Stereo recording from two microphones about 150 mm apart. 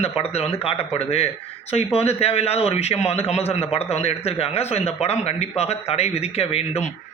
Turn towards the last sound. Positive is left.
turn(degrees=40)  # may be behind; listen again after turning